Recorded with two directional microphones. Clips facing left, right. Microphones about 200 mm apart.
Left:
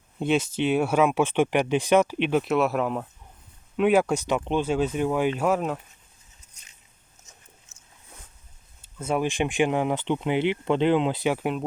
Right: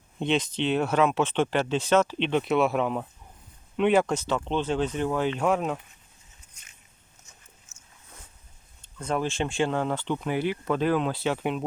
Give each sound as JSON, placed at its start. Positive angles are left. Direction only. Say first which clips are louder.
{"t": 0.2, "sound": "speech", "louder": "left 2 dB", "side_deg": 5}
{"t": 8.8, "sound": "speech", "louder": "left 2 dB", "side_deg": 5}
{"t": 11.3, "sound": "speech", "louder": "left 1 dB", "side_deg": 0}